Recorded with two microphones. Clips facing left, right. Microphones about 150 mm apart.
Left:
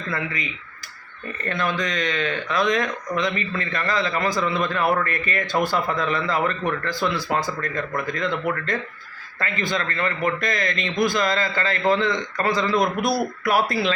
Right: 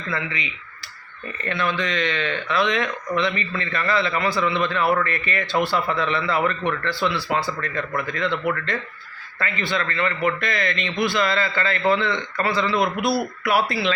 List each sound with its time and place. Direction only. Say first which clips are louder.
0.1 s speech: even; 45° left (ahead or behind)
1.5 s speech: right 1 dB; 45° left (ahead or behind)
9.4 s speech: even; 40° left (ahead or behind)